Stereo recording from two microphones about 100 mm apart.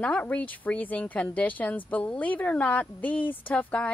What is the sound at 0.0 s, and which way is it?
A woman's voice, 15° left (ahead or behind).